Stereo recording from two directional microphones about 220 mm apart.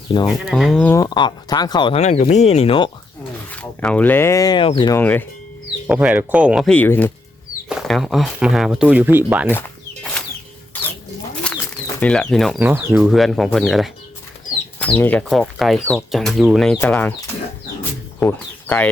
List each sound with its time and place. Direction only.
0.3 s speech: centre (ahead or behind); by 2.9 s 25° left (ahead or behind)
3.5 s speech: 5° left (ahead or behind); by 4.9 s 20° left (ahead or behind)
4.9 s speech: 10° left (ahead or behind)
5.9 s speech: 5° right (ahead or behind)
9.5 s chicken: 5° left (ahead or behind)
10.7 s rodents: 10° left (ahead or behind)
11.5 s bird: 5° left (ahead or behind)
11.9 s speech: 5° left (ahead or behind)